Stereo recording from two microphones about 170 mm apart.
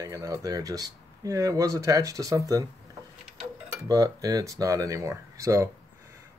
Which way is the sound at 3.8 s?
20° right (ahead or behind).